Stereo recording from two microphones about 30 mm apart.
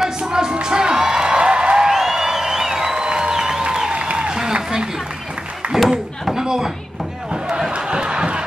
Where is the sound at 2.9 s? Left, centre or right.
Right.